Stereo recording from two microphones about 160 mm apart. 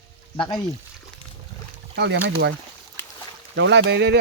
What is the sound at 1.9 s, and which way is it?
Speech, 90° right.